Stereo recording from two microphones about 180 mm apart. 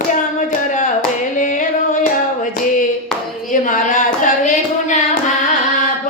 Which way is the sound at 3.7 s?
45° left (ahead or behind).